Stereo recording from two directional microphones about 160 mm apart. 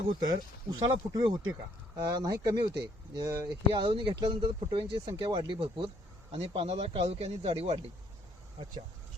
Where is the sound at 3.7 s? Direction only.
30° right (ahead or behind).